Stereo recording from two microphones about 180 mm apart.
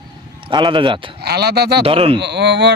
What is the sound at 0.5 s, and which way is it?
Speech, 25° right (ahead or behind).